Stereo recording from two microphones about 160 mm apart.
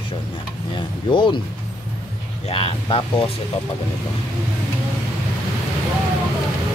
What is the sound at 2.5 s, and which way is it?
Speech, 35° left (ahead or behind).